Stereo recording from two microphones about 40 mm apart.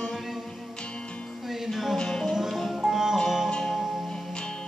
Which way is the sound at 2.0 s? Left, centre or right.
Centre.